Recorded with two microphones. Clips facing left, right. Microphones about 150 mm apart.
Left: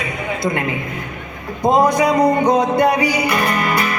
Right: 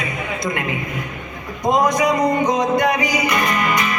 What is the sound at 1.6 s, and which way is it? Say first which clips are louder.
Music: left 3 dB; 30° left (ahead or behind).